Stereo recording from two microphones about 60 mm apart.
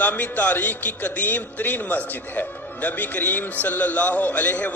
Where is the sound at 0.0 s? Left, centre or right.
Left.